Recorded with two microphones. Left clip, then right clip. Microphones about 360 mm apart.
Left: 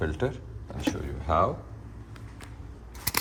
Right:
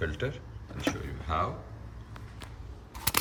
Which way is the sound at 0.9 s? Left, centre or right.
Centre.